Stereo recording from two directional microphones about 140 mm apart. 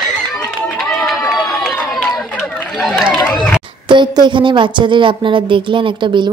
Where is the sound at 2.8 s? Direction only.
Centre (ahead or behind).